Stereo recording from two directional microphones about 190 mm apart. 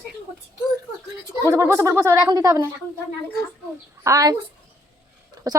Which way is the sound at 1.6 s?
15° right (ahead or behind).